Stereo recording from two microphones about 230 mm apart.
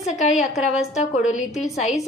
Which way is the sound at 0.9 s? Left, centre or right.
Left.